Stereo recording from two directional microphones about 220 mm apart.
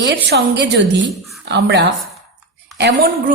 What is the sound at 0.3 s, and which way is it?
A woman's voice, 50° right (ahead or behind).